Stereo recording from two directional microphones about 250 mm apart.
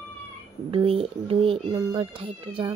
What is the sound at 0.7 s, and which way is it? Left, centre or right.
Speech, right.